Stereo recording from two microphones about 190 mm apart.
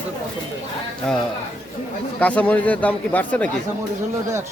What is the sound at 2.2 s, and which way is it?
Speech, 5° left (ahead or behind).